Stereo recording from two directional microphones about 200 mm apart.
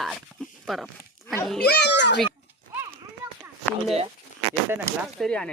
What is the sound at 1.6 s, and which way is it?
Speech, 55° left (ahead or behind).